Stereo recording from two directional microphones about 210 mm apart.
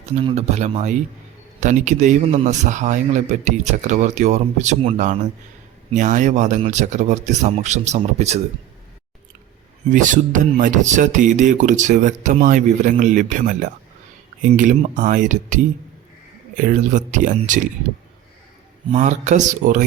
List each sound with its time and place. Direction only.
0.0 s speech: 30° right (ahead or behind)
9.9 s speech: 35° right (ahead or behind)
18.9 s speech: 35° right (ahead or behind)